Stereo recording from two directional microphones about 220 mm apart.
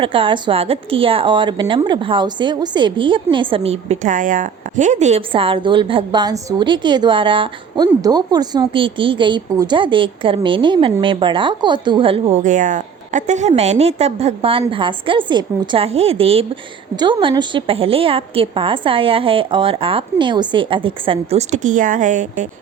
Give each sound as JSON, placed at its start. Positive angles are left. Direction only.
{"t": 0.0, "sound": "a woman's voice", "side_deg": -25}